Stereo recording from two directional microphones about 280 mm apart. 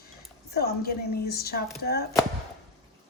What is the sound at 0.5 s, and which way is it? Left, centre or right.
A woman's voice, left.